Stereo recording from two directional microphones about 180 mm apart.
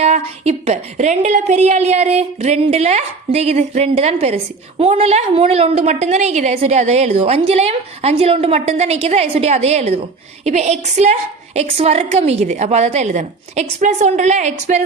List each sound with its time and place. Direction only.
0.0 s a woman's voice: 35° right (ahead or behind)